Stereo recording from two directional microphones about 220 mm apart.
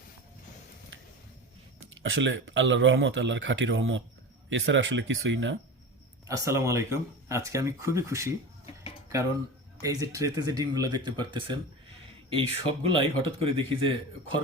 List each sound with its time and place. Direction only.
2.0 s speech: 55° right (ahead or behind)
6.2 s speech: 15° right (ahead or behind)
9.8 s a man's voice: 15° right (ahead or behind)